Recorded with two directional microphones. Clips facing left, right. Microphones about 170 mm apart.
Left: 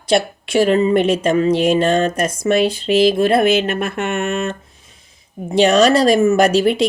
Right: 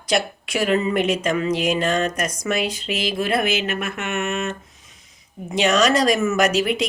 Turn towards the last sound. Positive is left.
turn(degrees=30)  # may be behind; listen again after turning